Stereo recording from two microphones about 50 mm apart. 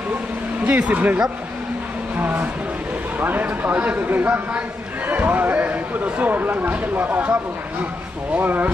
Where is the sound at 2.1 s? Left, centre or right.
Right.